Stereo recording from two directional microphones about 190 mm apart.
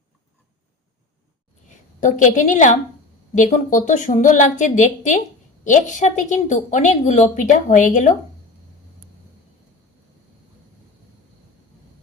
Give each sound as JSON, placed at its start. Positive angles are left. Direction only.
{"t": 2.0, "sound": "a woman's voice", "side_deg": 40}